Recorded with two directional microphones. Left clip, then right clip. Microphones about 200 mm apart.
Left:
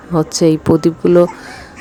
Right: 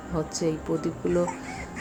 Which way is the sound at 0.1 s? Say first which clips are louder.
Left 15 dB; 40° left (ahead or behind).